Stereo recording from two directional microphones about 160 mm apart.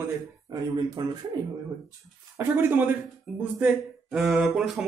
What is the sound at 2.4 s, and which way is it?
Speech, 15° right (ahead or behind).